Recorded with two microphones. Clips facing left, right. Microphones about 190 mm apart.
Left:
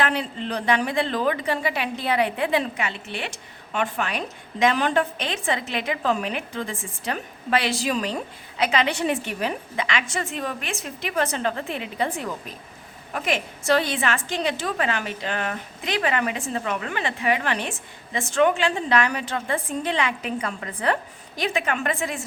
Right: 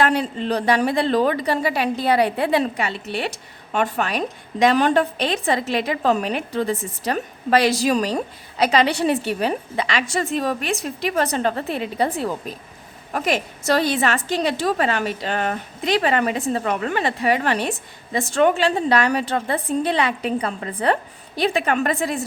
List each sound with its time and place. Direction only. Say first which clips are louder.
0.0 s a woman's voice: right 5 dB; 40° right (ahead or behind)